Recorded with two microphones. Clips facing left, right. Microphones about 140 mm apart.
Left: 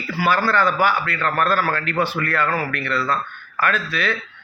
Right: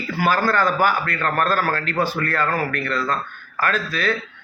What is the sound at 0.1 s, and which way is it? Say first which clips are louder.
A man's voice: even; 45° right (ahead or behind).